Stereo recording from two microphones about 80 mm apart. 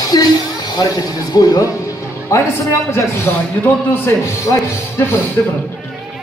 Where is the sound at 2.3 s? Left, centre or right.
Left.